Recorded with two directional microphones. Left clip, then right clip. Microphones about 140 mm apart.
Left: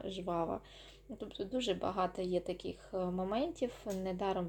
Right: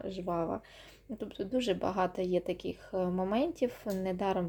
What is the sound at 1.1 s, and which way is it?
Speech, 30° right (ahead or behind).